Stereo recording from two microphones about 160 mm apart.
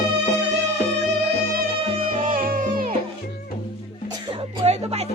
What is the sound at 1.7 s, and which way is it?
Music, 35° right (ahead or behind).